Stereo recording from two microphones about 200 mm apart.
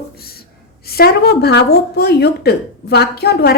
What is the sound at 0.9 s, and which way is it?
A woman's voice, 50° left (ahead or behind).